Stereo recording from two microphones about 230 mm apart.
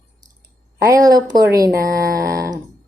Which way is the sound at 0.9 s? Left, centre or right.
Centre.